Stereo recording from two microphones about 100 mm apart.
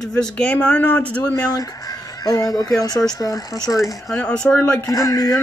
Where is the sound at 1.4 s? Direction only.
35° left (ahead or behind).